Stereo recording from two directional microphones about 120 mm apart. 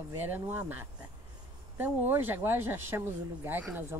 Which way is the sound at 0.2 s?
15° right (ahead or behind).